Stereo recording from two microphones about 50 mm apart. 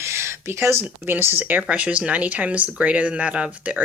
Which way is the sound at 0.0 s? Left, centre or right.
Right.